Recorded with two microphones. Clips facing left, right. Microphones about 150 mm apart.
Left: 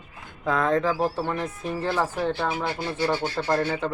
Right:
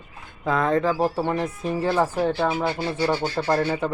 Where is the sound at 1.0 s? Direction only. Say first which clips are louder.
Right 3 dB; 15° right (ahead or behind).